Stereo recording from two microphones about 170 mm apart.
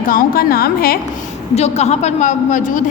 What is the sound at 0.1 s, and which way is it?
Speech, 55° left (ahead or behind).